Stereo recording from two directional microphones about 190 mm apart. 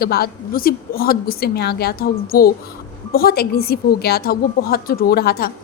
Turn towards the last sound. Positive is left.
turn(degrees=55)  # may be behind; listen again after turning